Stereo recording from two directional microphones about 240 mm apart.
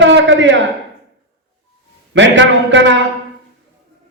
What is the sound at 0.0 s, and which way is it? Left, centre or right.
Speech, right.